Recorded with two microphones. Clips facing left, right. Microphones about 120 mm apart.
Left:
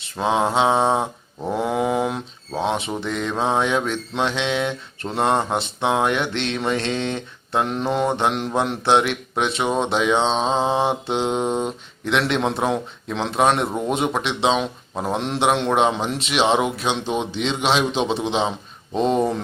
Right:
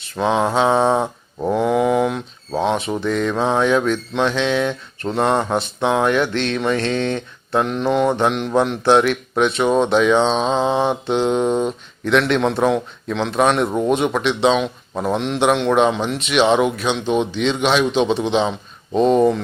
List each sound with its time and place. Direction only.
0.2 s mantra: 25° left (ahead or behind)
1.5 s a sound: 25° left (ahead or behind)
2.7 s mantra: 25° left (ahead or behind)
15.2 s a man's voice: 30° left (ahead or behind)
15.7 s mantra: 25° left (ahead or behind)